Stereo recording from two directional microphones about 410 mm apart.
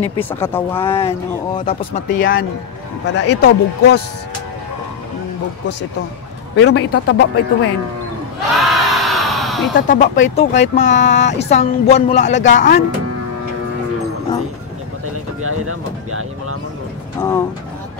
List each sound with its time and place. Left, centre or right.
0.0 s speech: centre
2.0 s speech: left
6.5 s speech: left
8.5 s a sound: centre
9.8 s speech: centre
15.4 s a sound: right
17.2 s speech: centre